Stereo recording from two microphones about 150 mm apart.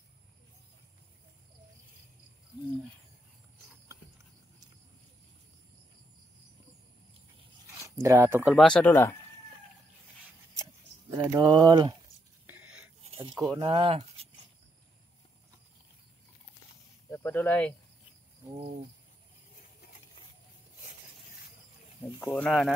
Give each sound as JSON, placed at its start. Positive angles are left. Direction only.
{"t": 7.8, "sound": "speech", "side_deg": -20}
{"t": 8.5, "sound": "speech", "side_deg": 5}
{"t": 10.5, "sound": "a sound", "side_deg": -20}
{"t": 13.5, "sound": "speech", "side_deg": -30}
{"t": 13.7, "sound": "speech", "side_deg": -40}
{"t": 17.1, "sound": "cricket", "side_deg": 15}
{"t": 22.2, "sound": "speech", "side_deg": 5}